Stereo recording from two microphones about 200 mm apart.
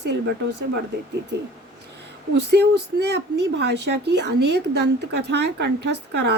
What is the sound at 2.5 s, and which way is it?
A woman's voice, 55° right (ahead or behind).